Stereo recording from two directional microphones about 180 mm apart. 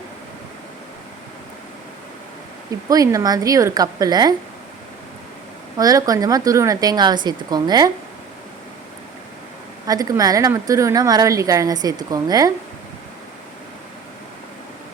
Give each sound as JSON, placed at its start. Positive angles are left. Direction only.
{"t": 2.9, "sound": "a woman's voice", "side_deg": -20}
{"t": 5.7, "sound": "a woman's voice", "side_deg": -20}
{"t": 9.8, "sound": "a woman's voice", "side_deg": -20}